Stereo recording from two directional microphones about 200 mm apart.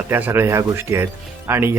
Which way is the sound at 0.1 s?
10° right (ahead or behind).